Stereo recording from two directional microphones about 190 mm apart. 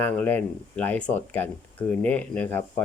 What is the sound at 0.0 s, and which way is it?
Speech, 10° left (ahead or behind).